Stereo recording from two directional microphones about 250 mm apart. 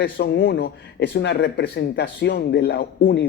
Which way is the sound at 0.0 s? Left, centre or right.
Left.